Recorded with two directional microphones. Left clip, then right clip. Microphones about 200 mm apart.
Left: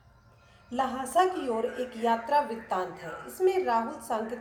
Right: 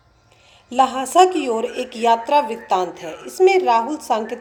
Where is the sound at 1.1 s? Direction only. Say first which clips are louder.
Right 8 dB; 40° right (ahead or behind).